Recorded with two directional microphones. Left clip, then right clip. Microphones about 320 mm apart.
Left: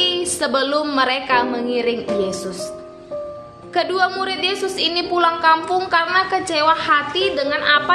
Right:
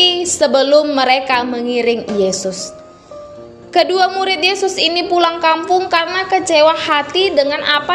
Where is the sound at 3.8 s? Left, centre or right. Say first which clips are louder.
Right 6 dB; centre.